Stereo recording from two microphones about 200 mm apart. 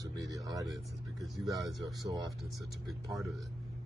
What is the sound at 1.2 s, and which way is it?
Speech, centre (ahead or behind).